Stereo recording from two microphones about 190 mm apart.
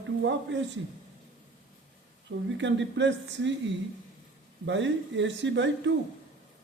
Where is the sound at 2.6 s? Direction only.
70° right (ahead or behind).